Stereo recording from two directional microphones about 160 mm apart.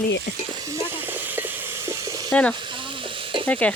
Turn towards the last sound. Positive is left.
turn(degrees=10)  # may be behind; listen again after turning